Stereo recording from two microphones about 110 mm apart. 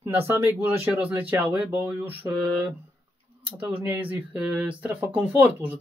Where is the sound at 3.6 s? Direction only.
15° right (ahead or behind).